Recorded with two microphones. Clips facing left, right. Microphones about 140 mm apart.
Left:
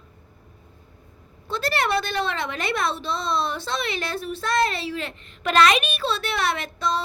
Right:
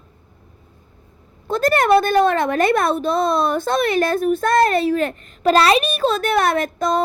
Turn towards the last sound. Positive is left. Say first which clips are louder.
# right 7 dB
turn(degrees=-45)  # may be behind; listen again after turning